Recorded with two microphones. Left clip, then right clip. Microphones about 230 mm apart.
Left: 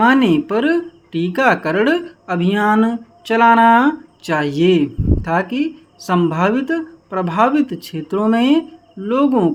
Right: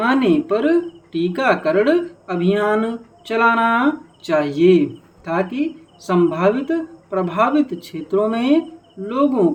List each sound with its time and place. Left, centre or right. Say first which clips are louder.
0.0 s speech: left 3 dB; left